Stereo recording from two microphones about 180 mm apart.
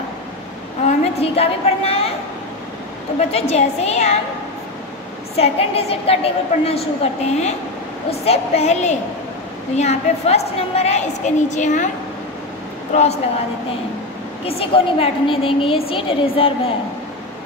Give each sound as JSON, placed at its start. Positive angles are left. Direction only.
{"t": 0.8, "sound": "a woman's voice", "side_deg": 35}
{"t": 3.2, "sound": "a woman's voice", "side_deg": 35}
{"t": 5.3, "sound": "a woman's voice", "side_deg": 35}
{"t": 12.9, "sound": "a woman's voice", "side_deg": 35}
{"t": 14.4, "sound": "a woman's voice", "side_deg": 30}